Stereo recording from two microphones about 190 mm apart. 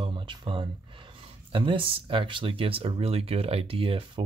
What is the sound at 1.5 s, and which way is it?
Speech, 25° right (ahead or behind).